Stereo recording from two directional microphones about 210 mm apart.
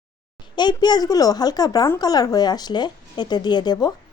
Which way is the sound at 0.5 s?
20° left (ahead or behind).